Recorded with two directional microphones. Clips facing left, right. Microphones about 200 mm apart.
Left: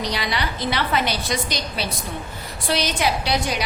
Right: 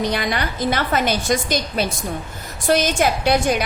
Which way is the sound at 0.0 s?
50° right (ahead or behind).